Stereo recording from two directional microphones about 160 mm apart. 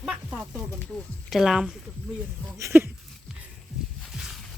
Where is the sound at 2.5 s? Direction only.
15° right (ahead or behind).